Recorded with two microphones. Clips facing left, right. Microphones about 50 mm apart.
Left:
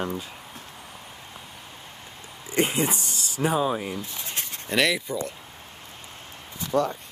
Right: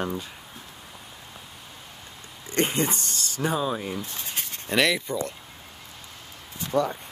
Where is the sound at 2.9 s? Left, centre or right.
Right.